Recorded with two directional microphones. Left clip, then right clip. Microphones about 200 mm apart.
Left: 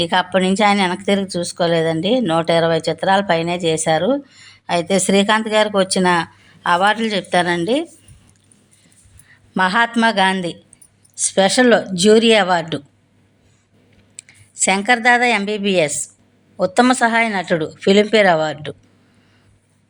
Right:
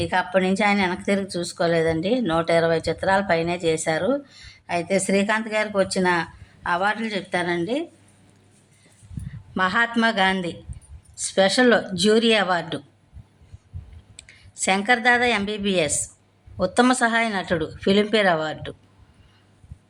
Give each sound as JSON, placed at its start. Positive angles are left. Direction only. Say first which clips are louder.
{"t": 0.0, "sound": "a woman's voice", "louder": "left 5 dB", "side_deg": 20}
{"t": 9.6, "sound": "speech", "louder": "left 5 dB", "side_deg": 20}
{"t": 14.2, "sound": "a woman's voice", "louder": "left 9 dB", "side_deg": 10}